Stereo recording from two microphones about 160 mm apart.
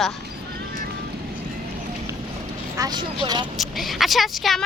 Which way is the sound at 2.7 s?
25° right (ahead or behind).